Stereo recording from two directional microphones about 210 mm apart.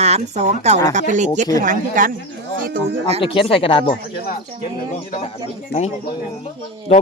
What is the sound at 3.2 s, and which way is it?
Speech, 25° left (ahead or behind).